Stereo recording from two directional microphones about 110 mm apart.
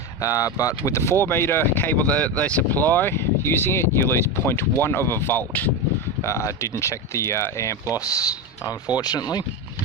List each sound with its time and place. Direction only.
0.2 s speech: 30° left (ahead or behind)